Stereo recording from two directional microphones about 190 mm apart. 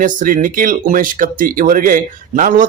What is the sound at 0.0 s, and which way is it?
Speech, 45° right (ahead or behind).